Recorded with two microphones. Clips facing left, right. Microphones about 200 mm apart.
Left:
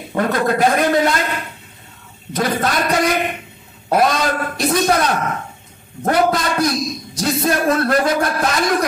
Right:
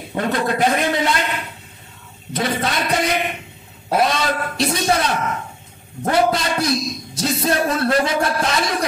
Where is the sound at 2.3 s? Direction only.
50° left (ahead or behind).